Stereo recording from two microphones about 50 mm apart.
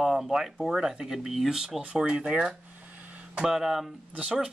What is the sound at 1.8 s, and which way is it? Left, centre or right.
Speech, right.